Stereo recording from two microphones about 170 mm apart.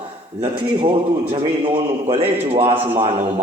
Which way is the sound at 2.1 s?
35° right (ahead or behind).